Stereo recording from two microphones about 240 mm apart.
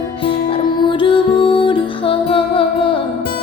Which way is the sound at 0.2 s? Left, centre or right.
Left.